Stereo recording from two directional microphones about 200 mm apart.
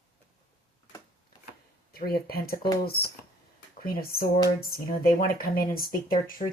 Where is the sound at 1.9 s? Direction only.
50° left (ahead or behind).